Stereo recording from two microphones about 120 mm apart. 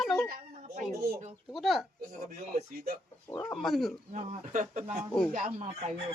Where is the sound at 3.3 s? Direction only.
25° left (ahead or behind).